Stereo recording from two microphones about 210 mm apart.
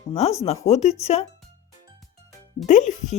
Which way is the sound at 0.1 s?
30° left (ahead or behind).